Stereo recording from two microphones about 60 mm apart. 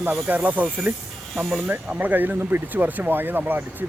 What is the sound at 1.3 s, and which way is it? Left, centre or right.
Speech, centre.